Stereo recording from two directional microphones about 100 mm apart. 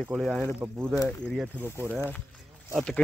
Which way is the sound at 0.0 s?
Centre (ahead or behind).